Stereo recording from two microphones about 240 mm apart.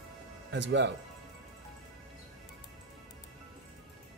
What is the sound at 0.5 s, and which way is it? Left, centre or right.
Speech, right.